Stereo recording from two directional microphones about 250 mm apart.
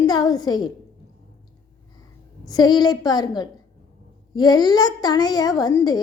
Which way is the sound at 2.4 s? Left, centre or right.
Centre.